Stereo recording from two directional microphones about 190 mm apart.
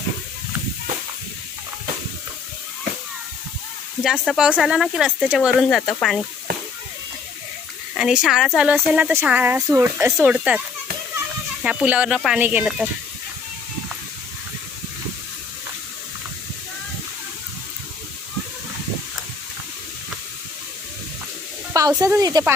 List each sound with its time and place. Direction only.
4.0 s speech: centre (ahead or behind)
7.9 s speech: 5° right (ahead or behind)
10.1 s speech: 5° right (ahead or behind)
11.6 s speech: 5° right (ahead or behind)
21.7 s speech: 20° right (ahead or behind)